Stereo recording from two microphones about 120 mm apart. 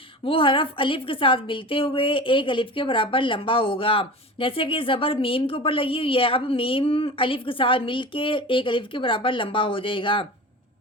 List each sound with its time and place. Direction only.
0.3 s a woman's voice: 45° left (ahead or behind)